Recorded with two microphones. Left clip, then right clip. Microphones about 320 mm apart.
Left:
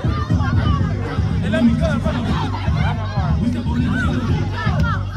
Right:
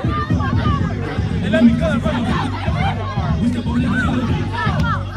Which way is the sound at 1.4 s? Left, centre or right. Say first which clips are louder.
Right 3 dB; left.